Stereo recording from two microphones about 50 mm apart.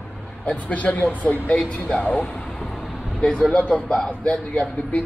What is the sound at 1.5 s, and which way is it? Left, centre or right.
Speech, left.